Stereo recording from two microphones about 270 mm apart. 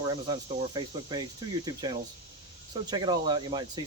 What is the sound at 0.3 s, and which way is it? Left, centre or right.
Speech, centre.